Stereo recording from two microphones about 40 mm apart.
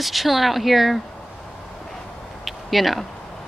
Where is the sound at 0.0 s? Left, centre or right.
Centre.